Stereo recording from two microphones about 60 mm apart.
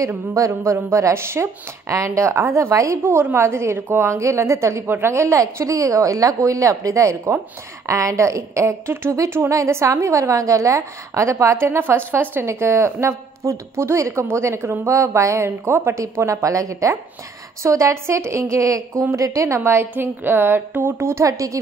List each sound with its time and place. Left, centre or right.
0.3 s a woman's voice: right
3.0 s a woman's voice: right
4.8 s a woman's voice: right
9.1 s a woman's voice: right
11.8 s a woman's voice: right
21.3 s speech: right